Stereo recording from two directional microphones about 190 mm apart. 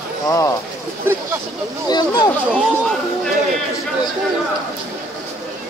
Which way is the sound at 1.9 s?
20° left (ahead or behind).